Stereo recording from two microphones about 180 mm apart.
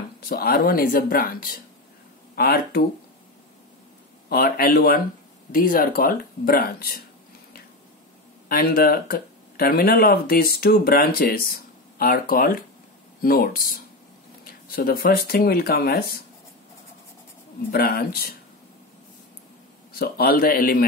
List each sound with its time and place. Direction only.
0.2 s speech: 55° left (ahead or behind)
4.3 s speech: 55° left (ahead or behind)
8.5 s speech: 55° left (ahead or behind)
17.6 s speech: 60° left (ahead or behind)
19.9 s speech: 60° left (ahead or behind)